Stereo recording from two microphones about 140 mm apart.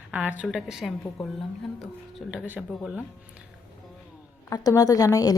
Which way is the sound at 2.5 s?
5° right (ahead or behind).